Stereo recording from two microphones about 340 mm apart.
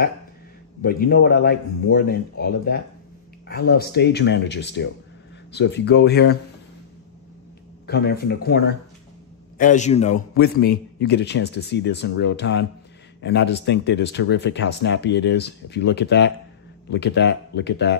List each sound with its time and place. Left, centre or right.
0.8 s a man's voice: left
7.8 s a man's voice: left